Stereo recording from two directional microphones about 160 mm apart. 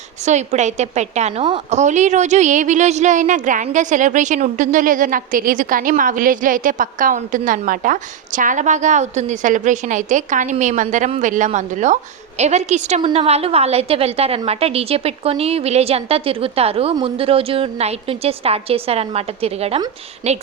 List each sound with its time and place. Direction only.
0.3 s a woman's voice: 45° right (ahead or behind)